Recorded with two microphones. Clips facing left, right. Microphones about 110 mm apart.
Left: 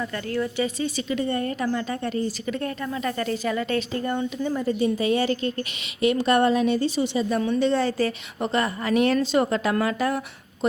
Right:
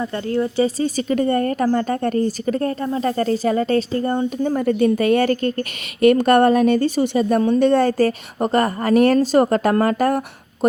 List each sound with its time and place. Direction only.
0.0 s speech: 30° right (ahead or behind)
4.5 s a woman's voice: 60° right (ahead or behind)